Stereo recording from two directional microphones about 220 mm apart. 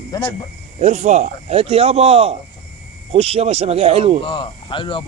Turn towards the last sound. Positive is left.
turn(degrees=20)  # may be behind; listen again after turning